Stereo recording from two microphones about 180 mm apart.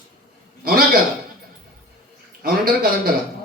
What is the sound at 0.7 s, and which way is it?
Speech, 55° right (ahead or behind).